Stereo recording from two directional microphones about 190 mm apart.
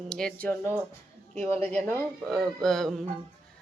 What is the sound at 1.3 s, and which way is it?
Speech, 35° right (ahead or behind).